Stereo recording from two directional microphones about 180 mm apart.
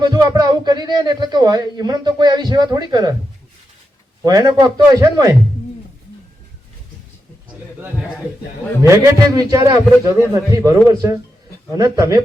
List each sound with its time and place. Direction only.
0.0 s a man's voice: 25° right (ahead or behind)
4.2 s a man's voice: 20° right (ahead or behind)
8.8 s a man's voice: 15° right (ahead or behind)